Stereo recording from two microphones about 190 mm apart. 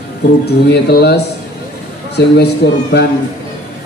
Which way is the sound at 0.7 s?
60° left (ahead or behind).